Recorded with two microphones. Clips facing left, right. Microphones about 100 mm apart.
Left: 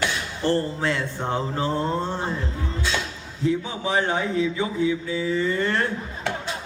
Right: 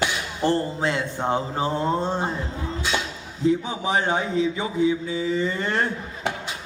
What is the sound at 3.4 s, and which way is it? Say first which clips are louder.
Speech: right 2 dB; 20° right (ahead or behind).